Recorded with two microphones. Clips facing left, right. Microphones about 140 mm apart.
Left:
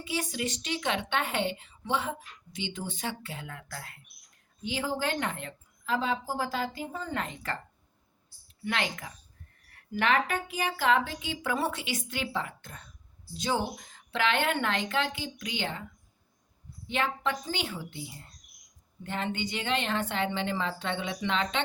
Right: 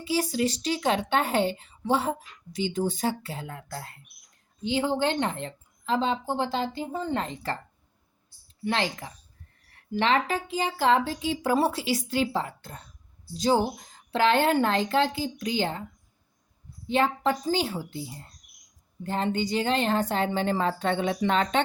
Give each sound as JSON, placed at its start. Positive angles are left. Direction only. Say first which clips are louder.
{"t": 0.0, "sound": "a woman's voice", "louder": "right 7 dB", "side_deg": -30}
{"t": 8.6, "sound": "a woman's voice", "louder": "right 4 dB", "side_deg": -30}
{"t": 16.8, "sound": "a woman's voice", "louder": "right 6 dB", "side_deg": -35}